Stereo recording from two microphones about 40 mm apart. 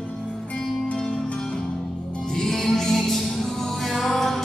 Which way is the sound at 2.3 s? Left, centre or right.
Centre.